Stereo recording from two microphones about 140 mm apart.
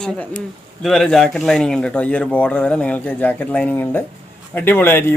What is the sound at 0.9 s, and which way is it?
Speech, centre (ahead or behind).